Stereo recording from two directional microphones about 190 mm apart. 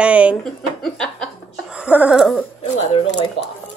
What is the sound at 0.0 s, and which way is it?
Speech, 5° right (ahead or behind).